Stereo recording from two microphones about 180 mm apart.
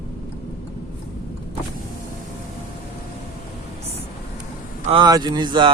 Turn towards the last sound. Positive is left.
turn(degrees=-25)  # may be behind; listen again after turning